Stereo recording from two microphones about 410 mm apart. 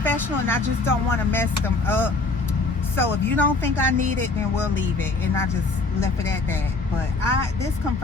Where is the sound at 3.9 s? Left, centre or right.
Centre.